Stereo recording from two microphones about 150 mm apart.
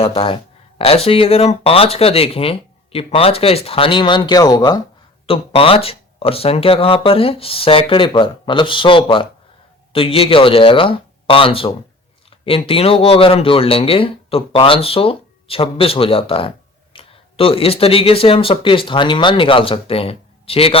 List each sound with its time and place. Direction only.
0.0 s speech: 40° left (ahead or behind)
5.2 s speech: 40° left (ahead or behind)